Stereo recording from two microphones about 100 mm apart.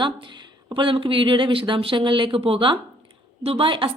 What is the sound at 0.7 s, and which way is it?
Speech, 60° right (ahead or behind).